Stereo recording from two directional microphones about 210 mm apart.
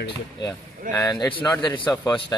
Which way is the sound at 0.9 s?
15° left (ahead or behind).